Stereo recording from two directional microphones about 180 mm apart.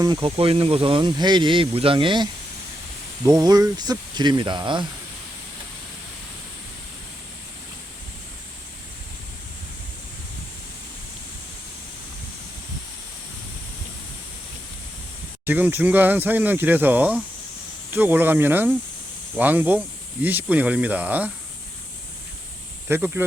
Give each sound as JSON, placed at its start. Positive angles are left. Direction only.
{"t": 0.0, "sound": "speech", "side_deg": -25}
{"t": 15.4, "sound": "speech", "side_deg": -10}
{"t": 22.9, "sound": "speech", "side_deg": -10}